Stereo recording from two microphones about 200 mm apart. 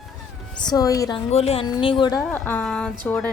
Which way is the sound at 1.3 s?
30° left (ahead or behind).